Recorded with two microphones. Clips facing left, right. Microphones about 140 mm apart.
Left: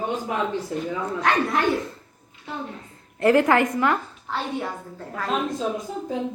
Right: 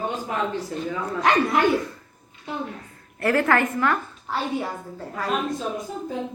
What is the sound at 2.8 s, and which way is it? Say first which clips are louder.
A woman's voice: left 7 dB; 20° left (ahead or behind).